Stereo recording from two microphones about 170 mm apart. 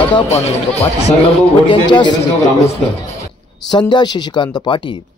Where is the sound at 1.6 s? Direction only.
30° left (ahead or behind).